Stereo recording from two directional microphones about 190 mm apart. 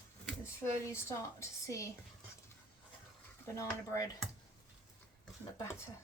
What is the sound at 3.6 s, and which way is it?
Speech, 15° left (ahead or behind).